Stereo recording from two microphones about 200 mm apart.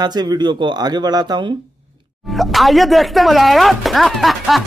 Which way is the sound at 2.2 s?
Centre (ahead or behind).